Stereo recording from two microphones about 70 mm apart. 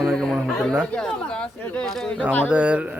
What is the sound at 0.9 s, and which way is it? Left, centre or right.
Speech, centre.